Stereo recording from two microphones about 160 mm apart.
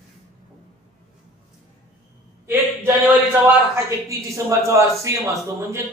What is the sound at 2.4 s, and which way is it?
A man's voice, 15° right (ahead or behind).